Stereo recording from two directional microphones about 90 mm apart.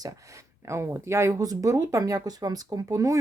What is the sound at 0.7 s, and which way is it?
Speech, 30° right (ahead or behind).